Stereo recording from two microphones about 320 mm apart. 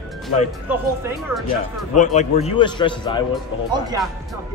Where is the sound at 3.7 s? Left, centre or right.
Centre.